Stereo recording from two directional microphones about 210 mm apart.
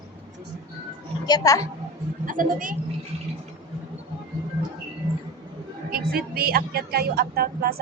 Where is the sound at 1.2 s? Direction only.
15° left (ahead or behind).